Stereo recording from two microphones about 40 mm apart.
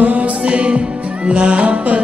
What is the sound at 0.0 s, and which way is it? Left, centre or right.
Music, right.